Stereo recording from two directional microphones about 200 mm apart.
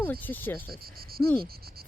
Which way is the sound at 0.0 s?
10° left (ahead or behind).